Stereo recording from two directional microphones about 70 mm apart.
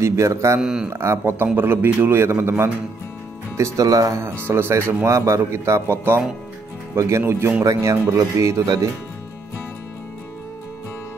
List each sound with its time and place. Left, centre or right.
0.0 s speech: right
0.6 s speech: centre
0.8 s a man's voice: right
3.5 s speech: right
4.5 s a man's voice: right
7.6 s speech: right